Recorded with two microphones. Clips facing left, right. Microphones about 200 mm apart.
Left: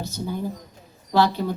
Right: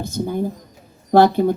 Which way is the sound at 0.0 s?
50° right (ahead or behind).